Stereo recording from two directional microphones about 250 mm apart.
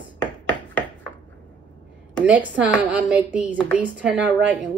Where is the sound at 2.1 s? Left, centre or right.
Centre.